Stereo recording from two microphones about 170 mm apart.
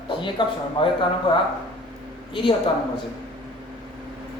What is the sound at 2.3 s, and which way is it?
Speech, 30° left (ahead or behind).